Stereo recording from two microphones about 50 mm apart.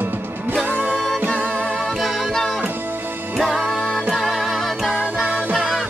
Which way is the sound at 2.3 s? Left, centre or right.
Centre.